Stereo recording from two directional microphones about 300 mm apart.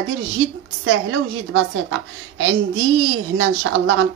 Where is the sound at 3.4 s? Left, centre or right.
Right.